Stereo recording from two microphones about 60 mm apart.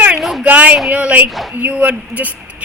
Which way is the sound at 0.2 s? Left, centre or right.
Centre.